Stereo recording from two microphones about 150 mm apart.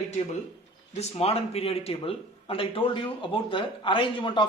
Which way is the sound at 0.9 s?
40° left (ahead or behind).